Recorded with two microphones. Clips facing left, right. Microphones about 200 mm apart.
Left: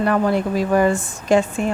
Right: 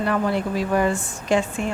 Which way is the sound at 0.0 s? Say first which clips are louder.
Left 4 dB; 50° left (ahead or behind).